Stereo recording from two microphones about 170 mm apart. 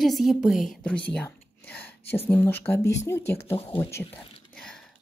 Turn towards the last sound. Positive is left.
turn(degrees=15)  # may be behind; listen again after turning